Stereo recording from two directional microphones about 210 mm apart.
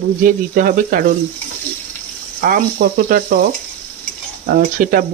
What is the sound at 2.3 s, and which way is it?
Sizzle, 40° right (ahead or behind).